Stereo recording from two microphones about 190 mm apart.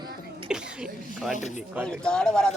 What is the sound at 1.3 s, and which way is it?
Speech, 40° left (ahead or behind).